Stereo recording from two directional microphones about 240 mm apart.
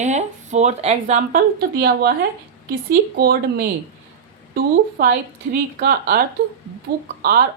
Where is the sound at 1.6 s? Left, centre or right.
Right.